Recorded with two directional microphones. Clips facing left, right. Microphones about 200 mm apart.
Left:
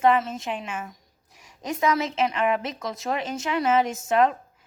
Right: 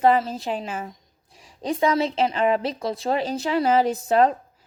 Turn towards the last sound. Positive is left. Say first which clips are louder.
# right 3 dB
turn(degrees=-35)  # may be behind; listen again after turning